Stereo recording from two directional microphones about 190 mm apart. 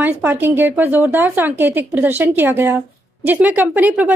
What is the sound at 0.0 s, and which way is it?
A woman's voice, 10° right (ahead or behind).